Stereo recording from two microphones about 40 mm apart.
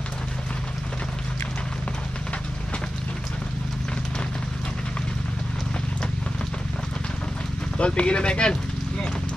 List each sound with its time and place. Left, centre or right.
7.7 s speech: left